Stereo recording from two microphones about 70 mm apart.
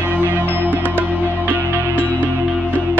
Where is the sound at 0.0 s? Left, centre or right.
Right.